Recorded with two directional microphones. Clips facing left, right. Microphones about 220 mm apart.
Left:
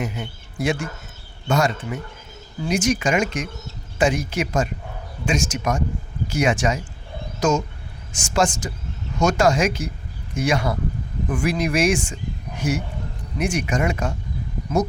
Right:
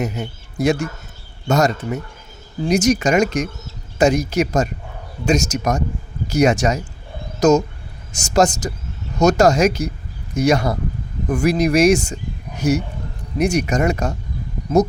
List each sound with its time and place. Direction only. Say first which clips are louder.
0.0 s speech: right 4 dB; 40° right (ahead or behind)